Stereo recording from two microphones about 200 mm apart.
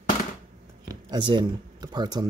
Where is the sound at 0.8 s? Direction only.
20° right (ahead or behind).